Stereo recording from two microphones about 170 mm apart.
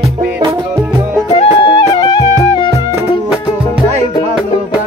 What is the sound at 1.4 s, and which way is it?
Music, 25° left (ahead or behind).